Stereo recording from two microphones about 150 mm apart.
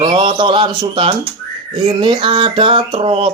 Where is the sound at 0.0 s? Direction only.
35° right (ahead or behind).